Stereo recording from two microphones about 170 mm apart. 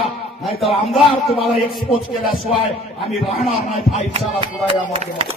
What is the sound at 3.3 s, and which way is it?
Speech, 35° left (ahead or behind).